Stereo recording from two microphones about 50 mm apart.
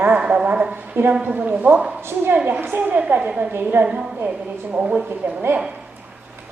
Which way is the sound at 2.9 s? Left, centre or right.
Right.